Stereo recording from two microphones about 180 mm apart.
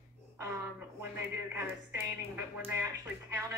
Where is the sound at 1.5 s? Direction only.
15° right (ahead or behind).